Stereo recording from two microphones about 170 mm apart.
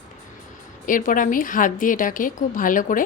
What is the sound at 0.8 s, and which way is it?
A woman's voice, 50° left (ahead or behind).